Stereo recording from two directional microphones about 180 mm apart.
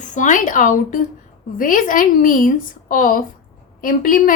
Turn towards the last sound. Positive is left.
turn(degrees=50)  # may be behind; listen again after turning